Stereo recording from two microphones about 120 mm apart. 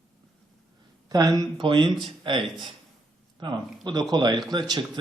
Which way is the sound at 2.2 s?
40° right (ahead or behind).